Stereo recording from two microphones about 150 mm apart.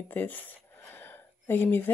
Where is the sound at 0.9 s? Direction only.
15° left (ahead or behind).